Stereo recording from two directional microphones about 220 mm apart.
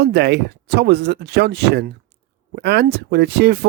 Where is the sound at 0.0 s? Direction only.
50° right (ahead or behind).